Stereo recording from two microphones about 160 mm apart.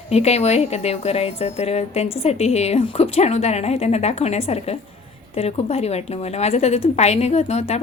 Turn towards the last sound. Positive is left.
turn(degrees=45)  # may be behind; listen again after turning